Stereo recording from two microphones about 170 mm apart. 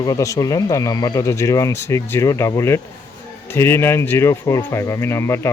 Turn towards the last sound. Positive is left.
turn(degrees=15)  # may be behind; listen again after turning